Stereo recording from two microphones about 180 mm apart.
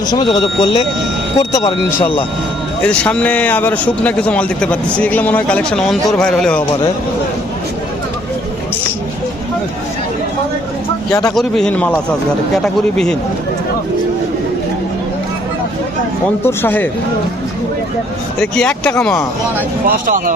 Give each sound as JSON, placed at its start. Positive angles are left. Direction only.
{"t": 0.1, "sound": "speech", "side_deg": 25}
{"t": 11.1, "sound": "speech", "side_deg": 20}
{"t": 11.3, "sound": "speech", "side_deg": 5}
{"t": 16.4, "sound": "speech", "side_deg": 10}
{"t": 18.3, "sound": "speech", "side_deg": 5}
{"t": 19.9, "sound": "speech", "side_deg": -50}